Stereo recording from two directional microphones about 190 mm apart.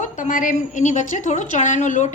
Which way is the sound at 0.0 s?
40° left (ahead or behind).